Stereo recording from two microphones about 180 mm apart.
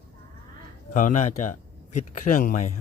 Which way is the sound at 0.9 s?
45° left (ahead or behind).